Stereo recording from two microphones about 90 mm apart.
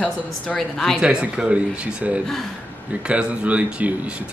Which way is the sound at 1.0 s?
10° right (ahead or behind).